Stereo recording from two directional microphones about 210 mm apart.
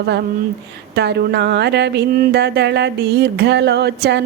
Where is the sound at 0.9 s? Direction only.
50° right (ahead or behind).